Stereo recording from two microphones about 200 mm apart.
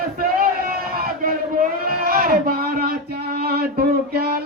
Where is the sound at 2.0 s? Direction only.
50° right (ahead or behind).